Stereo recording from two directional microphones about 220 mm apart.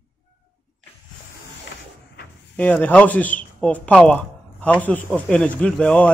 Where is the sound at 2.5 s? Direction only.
5° left (ahead or behind).